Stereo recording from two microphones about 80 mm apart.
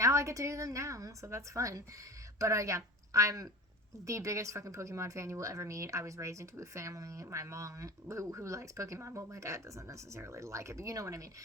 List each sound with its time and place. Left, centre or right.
0.0 s speech: right